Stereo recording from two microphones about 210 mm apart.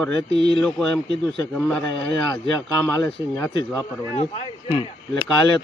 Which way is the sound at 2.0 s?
15° left (ahead or behind).